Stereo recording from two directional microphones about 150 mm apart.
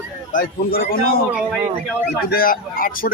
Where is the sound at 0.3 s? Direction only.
80° left.